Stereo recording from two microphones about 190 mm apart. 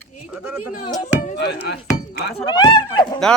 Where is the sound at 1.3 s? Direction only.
60° left (ahead or behind).